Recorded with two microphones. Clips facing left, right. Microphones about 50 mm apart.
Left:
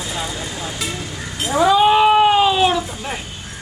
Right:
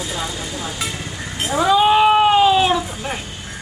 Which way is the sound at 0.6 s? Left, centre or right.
Centre.